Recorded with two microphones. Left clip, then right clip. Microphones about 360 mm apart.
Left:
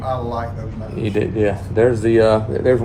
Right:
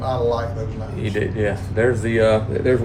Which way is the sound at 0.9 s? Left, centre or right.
Centre.